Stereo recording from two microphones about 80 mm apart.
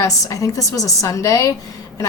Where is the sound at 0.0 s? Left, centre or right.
Left.